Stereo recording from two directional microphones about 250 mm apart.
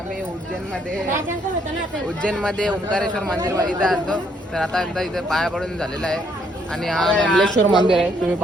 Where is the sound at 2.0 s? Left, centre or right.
Centre.